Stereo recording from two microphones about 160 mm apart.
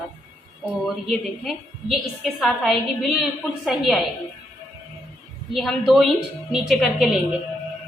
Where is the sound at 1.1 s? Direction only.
Centre (ahead or behind).